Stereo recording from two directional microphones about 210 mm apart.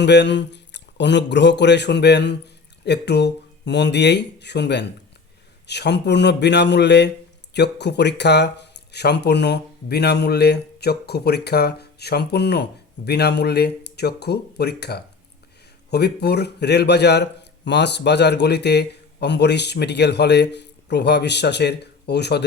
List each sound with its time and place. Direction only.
0.0 s speech: 55° left (ahead or behind)